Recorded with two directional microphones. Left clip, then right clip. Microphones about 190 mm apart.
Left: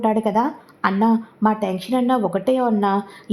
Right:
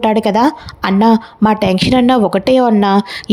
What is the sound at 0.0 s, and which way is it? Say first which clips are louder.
Speech: right 7 dB; 35° right (ahead or behind).